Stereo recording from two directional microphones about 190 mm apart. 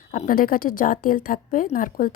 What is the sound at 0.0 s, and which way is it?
A woman's voice, 45° left (ahead or behind).